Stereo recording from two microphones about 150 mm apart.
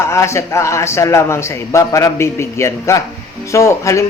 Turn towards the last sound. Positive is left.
turn(degrees=20)  # may be behind; listen again after turning